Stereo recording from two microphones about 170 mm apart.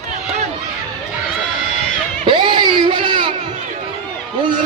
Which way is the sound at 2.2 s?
30° right (ahead or behind).